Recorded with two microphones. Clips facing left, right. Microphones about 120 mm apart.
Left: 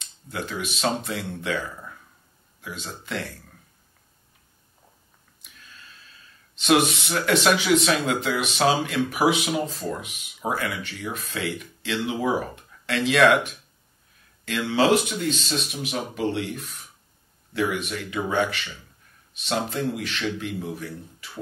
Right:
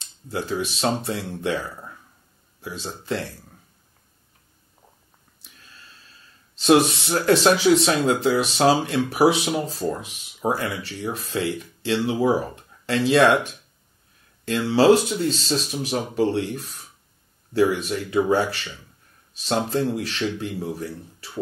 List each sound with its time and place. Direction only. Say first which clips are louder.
0.3 s speech: right 5 dB; 35° right (ahead or behind)
2.6 s speech: right 3 dB; 35° right (ahead or behind)
6.5 s speech: right 3 dB; 35° right (ahead or behind)